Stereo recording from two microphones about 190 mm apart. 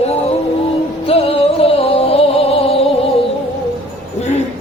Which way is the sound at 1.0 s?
30° left (ahead or behind).